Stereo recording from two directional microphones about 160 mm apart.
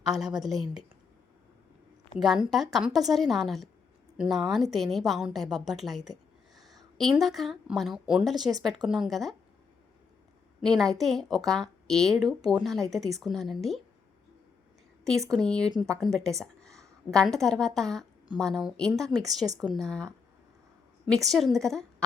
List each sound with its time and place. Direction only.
0.3 s a woman's voice: centre (ahead or behind)
2.1 s a woman's voice: centre (ahead or behind)
10.6 s a woman's voice: 5° left (ahead or behind)
15.3 s a woman's voice: 5° left (ahead or behind)